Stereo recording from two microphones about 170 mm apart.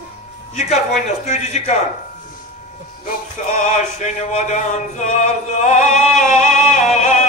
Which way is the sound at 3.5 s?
45° left (ahead or behind).